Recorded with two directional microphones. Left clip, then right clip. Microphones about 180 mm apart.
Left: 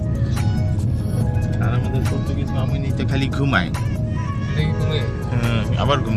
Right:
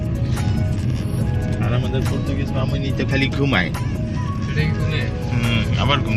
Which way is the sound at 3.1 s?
20° left (ahead or behind).